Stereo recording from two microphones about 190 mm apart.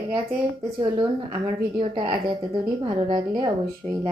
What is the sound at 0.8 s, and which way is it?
Speech, 20° right (ahead or behind).